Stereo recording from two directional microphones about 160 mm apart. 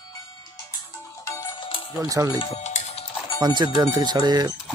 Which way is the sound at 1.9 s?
20° right (ahead or behind).